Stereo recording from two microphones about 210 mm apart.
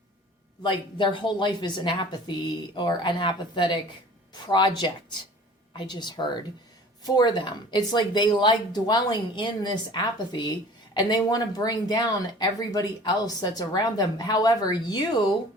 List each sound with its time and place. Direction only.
0.6 s speech: 25° left (ahead or behind)